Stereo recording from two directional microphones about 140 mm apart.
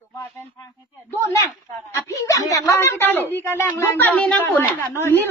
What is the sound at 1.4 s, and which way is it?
Speech, 20° left (ahead or behind).